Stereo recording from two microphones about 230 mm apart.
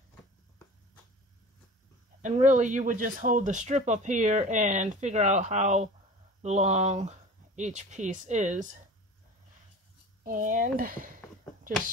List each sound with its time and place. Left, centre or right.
2.4 s speech: right
10.2 s speech: right